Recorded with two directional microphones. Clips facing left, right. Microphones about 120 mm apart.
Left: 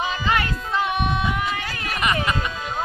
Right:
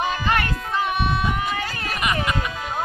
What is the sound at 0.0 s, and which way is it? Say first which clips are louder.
Music: right 1 dB; 50° right (ahead or behind).